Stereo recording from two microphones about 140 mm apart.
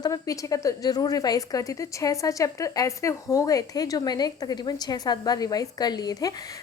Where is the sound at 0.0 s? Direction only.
25° left (ahead or behind).